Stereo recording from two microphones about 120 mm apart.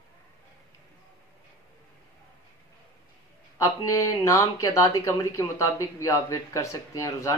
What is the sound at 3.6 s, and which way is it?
Speech, 30° left (ahead or behind).